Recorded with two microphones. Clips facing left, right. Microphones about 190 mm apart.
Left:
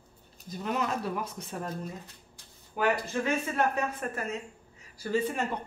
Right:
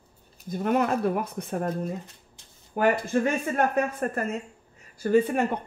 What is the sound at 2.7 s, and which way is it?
Speech, 50° right (ahead or behind).